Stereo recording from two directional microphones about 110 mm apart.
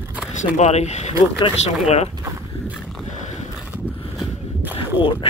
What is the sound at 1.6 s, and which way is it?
Speech, 80° left.